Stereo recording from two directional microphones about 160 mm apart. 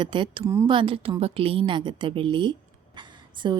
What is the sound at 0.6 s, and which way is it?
A woman's voice, 30° right (ahead or behind).